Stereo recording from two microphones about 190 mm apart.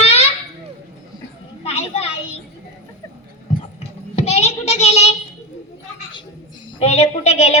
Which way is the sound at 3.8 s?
35° left (ahead or behind).